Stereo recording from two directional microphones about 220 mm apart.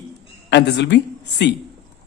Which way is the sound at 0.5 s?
50° left (ahead or behind).